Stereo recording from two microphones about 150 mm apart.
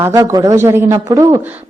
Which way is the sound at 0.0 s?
20° right (ahead or behind).